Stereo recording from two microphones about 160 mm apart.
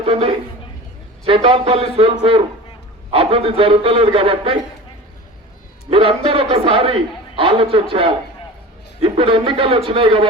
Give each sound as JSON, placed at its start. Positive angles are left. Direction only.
{"t": 0.0, "sound": "a man's voice", "side_deg": -40}
{"t": 5.9, "sound": "a man's voice", "side_deg": -35}